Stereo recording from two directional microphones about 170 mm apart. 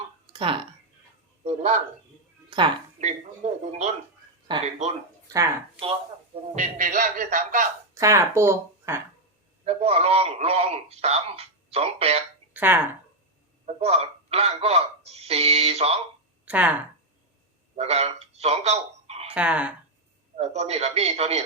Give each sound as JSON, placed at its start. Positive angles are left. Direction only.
{"t": 0.3, "sound": "a man's voice", "side_deg": -30}
{"t": 2.5, "sound": "a woman's voice", "side_deg": -25}
{"t": 3.0, "sound": "a man's voice", "side_deg": -40}
{"t": 4.5, "sound": "speech", "side_deg": -30}
{"t": 6.6, "sound": "speech", "side_deg": -50}
{"t": 7.9, "sound": "speech", "side_deg": -15}
{"t": 9.6, "sound": "a man's voice", "side_deg": -35}
{"t": 12.5, "sound": "speech", "side_deg": -10}
{"t": 13.7, "sound": "a man's voice", "side_deg": -35}
{"t": 16.5, "sound": "speech", "side_deg": -10}
{"t": 17.7, "sound": "speech", "side_deg": -40}
{"t": 19.3, "sound": "speech", "side_deg": -10}
{"t": 20.3, "sound": "a man's voice", "side_deg": -40}